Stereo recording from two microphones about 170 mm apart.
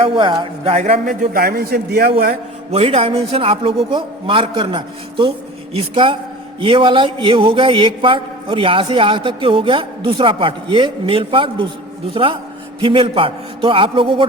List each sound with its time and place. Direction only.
0.0 s a man's voice: 30° right (ahead or behind); by 2.1 s 70° right (ahead or behind)
2.7 s a man's voice: 35° right (ahead or behind)